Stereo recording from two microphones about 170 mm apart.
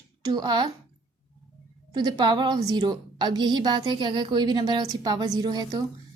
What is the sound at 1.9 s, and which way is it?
A woman's voice, 25° right (ahead or behind).